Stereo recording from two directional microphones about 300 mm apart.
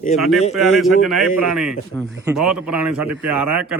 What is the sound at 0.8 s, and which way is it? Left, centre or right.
A man's voice, centre.